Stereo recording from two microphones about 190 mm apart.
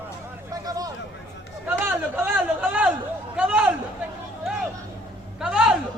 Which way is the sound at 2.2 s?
5° right (ahead or behind).